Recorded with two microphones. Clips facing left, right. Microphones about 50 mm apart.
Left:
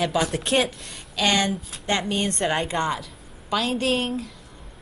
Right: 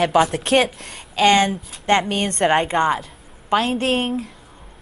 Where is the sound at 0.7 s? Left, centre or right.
Right.